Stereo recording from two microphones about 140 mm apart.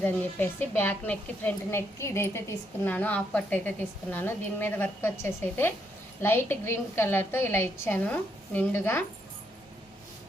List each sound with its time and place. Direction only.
0.0 s a woman's voice: 15° left (ahead or behind)